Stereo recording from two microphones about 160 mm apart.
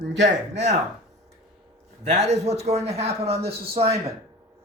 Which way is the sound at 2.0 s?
45° right (ahead or behind).